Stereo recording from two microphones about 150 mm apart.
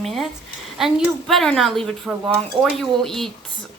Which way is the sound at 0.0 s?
Centre (ahead or behind).